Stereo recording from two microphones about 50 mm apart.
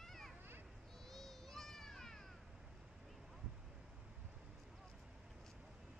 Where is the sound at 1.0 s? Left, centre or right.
Centre.